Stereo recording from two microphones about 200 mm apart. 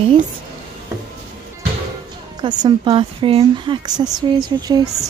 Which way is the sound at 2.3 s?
20° right (ahead or behind).